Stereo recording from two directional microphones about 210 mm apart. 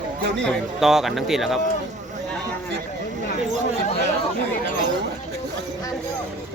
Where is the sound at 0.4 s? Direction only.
Centre (ahead or behind).